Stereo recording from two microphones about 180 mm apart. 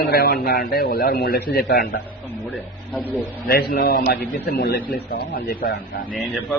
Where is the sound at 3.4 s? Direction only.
60° left (ahead or behind).